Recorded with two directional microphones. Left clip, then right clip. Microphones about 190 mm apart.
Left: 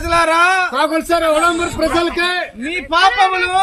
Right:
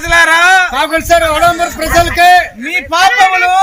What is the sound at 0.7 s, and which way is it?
A man's voice, 35° right (ahead or behind).